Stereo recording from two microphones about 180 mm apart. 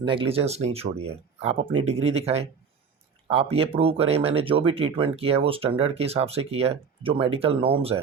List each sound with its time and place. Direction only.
0.1 s speech: 30° right (ahead or behind)